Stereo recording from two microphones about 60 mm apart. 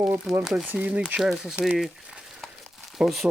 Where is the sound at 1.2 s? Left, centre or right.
Centre.